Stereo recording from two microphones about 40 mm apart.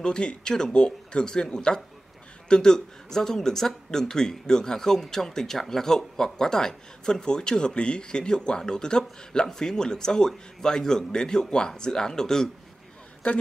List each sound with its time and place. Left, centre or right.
0.0 s speech: left
13.2 s speech: left